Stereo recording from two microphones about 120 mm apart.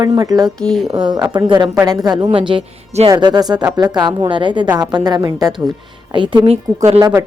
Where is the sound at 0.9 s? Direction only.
45° right (ahead or behind).